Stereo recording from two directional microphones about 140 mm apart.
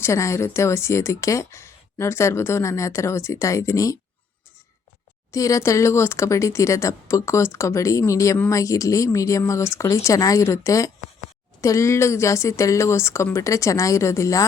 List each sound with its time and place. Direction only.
0.0 s speech: 20° left (ahead or behind)
5.3 s speech: 25° left (ahead or behind)